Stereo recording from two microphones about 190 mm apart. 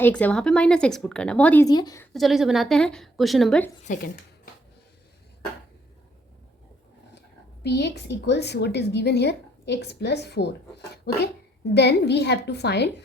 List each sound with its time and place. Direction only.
0.0 s speech: 5° left (ahead or behind)
1.6 s speech: 20° left (ahead or behind)
2.1 s speech: centre (ahead or behind)
3.8 s speech: 45° left (ahead or behind)
7.6 s a woman's voice: 65° left (ahead or behind)